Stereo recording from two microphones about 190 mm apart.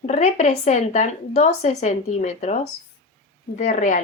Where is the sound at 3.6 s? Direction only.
40° left (ahead or behind).